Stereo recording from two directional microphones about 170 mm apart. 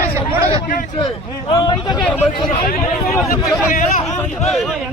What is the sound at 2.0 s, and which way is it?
Speech, 10° left (ahead or behind).